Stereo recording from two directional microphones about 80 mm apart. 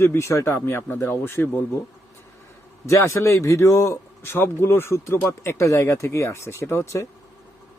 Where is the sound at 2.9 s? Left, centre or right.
Left.